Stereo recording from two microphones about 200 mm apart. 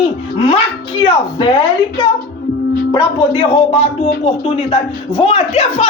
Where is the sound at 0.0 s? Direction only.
30° left (ahead or behind).